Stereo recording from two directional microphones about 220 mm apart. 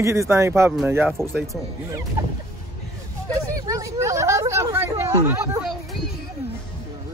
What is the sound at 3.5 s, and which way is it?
Hubbub, 15° right (ahead or behind).